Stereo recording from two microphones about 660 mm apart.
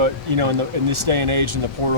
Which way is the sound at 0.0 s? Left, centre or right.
Right.